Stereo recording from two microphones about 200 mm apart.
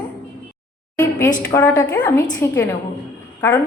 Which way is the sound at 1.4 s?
10° left (ahead or behind).